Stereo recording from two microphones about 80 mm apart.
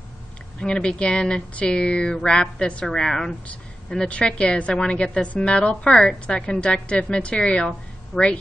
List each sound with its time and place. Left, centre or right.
0.6 s a woman's voice: centre